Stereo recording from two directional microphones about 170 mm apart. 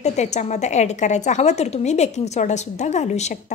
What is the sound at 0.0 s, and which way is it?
A woman's voice, 45° left (ahead or behind).